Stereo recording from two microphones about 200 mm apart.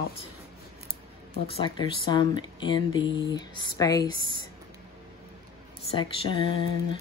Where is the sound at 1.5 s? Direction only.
25° left (ahead or behind).